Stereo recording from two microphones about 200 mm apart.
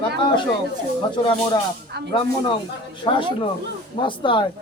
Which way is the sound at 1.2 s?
25° left (ahead or behind).